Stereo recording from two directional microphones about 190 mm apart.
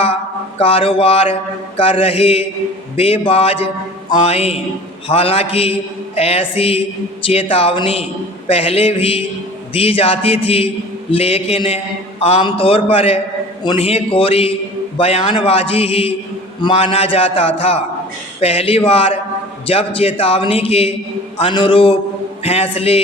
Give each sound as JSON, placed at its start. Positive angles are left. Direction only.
{"t": 0.6, "sound": "a woman's voice", "side_deg": 30}